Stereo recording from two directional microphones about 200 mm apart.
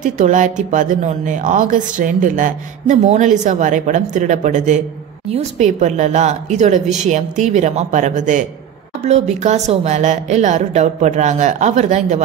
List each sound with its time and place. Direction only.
0.0 s speech: 40° right (ahead or behind)